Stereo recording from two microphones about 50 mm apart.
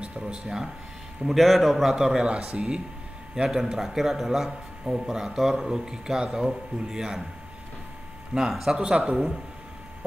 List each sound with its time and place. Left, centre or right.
0.0 s a sound: centre
1.2 s a man's voice: centre
8.4 s speech: centre
8.7 s a man's voice: centre
9.0 s speech: centre